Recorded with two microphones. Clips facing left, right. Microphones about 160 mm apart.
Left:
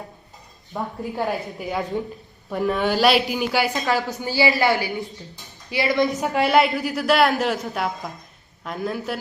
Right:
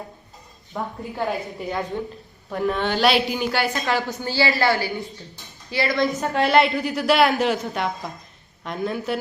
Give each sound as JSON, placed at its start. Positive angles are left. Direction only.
{"t": 0.7, "sound": "a woman's voice", "side_deg": 5}
{"t": 4.2, "sound": "speech", "side_deg": 15}
{"t": 6.1, "sound": "a woman's voice", "side_deg": 0}